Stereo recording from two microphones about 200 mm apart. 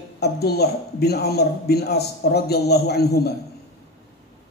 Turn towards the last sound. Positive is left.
turn(degrees=55)  # may be behind; listen again after turning